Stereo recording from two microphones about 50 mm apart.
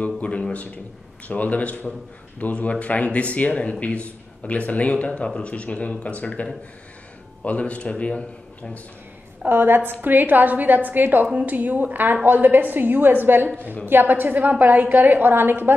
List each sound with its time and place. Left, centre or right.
0.0 s speech: left
7.4 s speech: left
9.5 s a woman's voice: right